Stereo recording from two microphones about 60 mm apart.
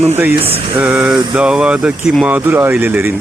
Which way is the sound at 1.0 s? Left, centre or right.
Centre.